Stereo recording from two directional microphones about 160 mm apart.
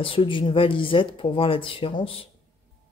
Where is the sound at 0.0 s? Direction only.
30° left (ahead or behind).